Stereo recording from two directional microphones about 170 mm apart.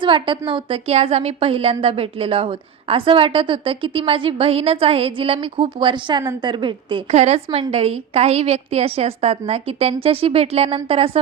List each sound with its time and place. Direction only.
0.0 s a woman's voice: 30° right (ahead or behind)